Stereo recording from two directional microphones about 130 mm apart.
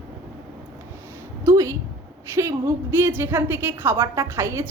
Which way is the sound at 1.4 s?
25° right (ahead or behind).